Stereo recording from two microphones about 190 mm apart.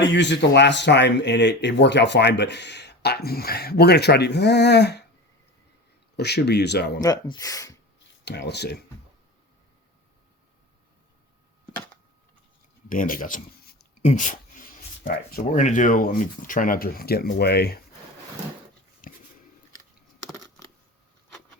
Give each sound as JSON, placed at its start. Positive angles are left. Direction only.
{"t": 0.1, "sound": "speech", "side_deg": 65}
{"t": 6.1, "sound": "speech", "side_deg": 60}
{"t": 7.0, "sound": "speech", "side_deg": 20}
{"t": 8.2, "sound": "speech", "side_deg": 60}
{"t": 12.9, "sound": "speech", "side_deg": 45}
{"t": 19.0, "sound": "a sound", "side_deg": 45}